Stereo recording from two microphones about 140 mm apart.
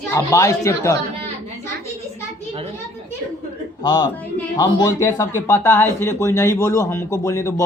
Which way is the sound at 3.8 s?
30° left (ahead or behind).